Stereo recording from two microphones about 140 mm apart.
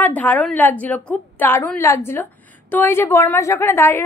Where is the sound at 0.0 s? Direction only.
10° left (ahead or behind).